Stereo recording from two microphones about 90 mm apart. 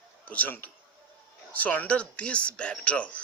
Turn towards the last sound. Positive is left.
turn(degrees=15)  # may be behind; listen again after turning